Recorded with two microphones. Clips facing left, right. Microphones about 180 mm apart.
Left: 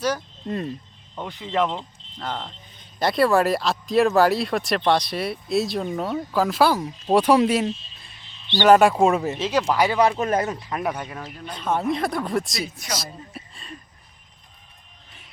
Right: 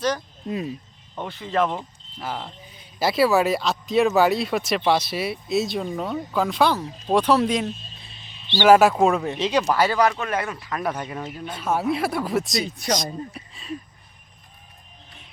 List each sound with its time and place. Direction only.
0.4 s cricket: 5° right (ahead or behind)
1.2 s speech: 15° left (ahead or behind)
1.6 s speech: 5° right (ahead or behind); by 7.7 s 10° left (ahead or behind)
8.5 s speech: 5° right (ahead or behind); by 10.0 s 15° left (ahead or behind)
10.0 s speech: 30° left (ahead or behind)
10.5 s speech: 25° left (ahead or behind)
10.9 s speech: 5° right (ahead or behind)